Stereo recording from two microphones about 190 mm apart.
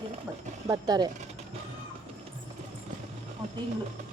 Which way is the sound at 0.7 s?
20° right (ahead or behind).